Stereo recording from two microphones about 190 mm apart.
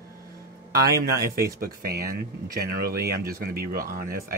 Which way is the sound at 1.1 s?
55° right (ahead or behind).